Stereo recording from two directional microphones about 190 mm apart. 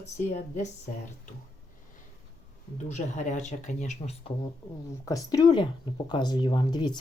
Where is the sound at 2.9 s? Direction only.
40° left (ahead or behind).